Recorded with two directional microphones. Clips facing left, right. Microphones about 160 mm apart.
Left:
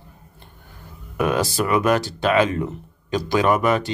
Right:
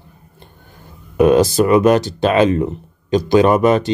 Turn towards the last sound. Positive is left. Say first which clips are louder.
# right 6 dB
turn(degrees=-25)  # may be behind; listen again after turning